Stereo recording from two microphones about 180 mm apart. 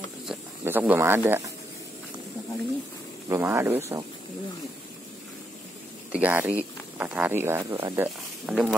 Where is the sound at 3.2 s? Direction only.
15° right (ahead or behind).